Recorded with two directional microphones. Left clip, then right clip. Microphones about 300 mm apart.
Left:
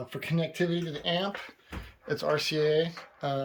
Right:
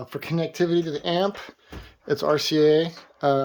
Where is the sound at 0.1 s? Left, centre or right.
Centre.